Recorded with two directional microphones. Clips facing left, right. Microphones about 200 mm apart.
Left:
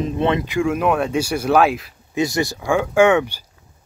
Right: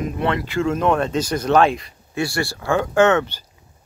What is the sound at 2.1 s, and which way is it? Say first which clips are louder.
Speech: left 3 dB; 20° left (ahead or behind).